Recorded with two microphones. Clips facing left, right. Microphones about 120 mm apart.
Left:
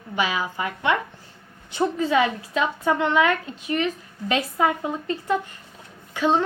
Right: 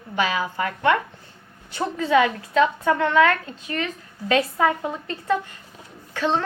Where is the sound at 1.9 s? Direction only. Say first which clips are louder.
Right 5 dB; 20° left (ahead or behind).